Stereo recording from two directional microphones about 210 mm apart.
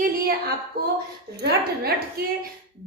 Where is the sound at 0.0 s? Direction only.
45° right (ahead or behind).